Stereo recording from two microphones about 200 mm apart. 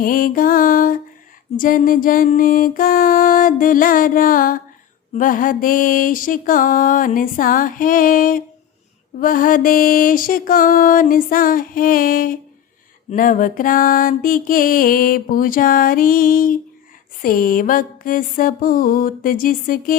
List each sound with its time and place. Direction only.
0.0 s mantra: 45° left (ahead or behind)